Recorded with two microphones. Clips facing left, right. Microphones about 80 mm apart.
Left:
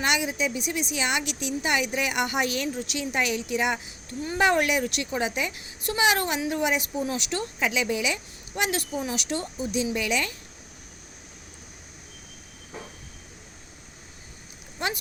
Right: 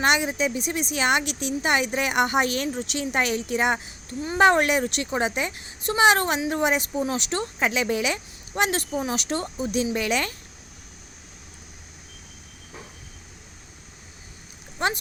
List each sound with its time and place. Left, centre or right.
0.0 s a woman's voice: right